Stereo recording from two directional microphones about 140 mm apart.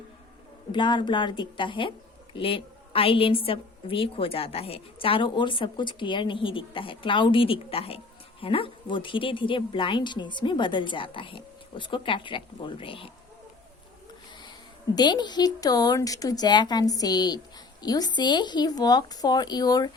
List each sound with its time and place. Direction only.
0.7 s a woman's voice: 35° left (ahead or behind)
14.9 s speech: 30° left (ahead or behind)